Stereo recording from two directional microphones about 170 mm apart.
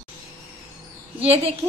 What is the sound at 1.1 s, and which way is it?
Speech, 35° right (ahead or behind).